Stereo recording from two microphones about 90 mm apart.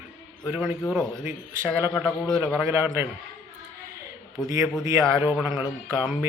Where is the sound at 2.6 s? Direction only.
25° right (ahead or behind).